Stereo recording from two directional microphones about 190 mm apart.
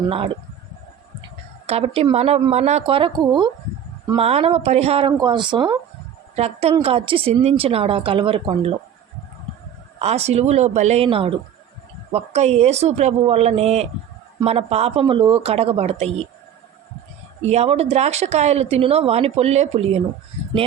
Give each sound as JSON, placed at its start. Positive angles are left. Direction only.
{"t": 0.1, "sound": "a woman's voice", "side_deg": -30}
{"t": 1.6, "sound": "a woman's voice", "side_deg": -30}
{"t": 10.0, "sound": "speech", "side_deg": -35}
{"t": 17.4, "sound": "speech", "side_deg": -35}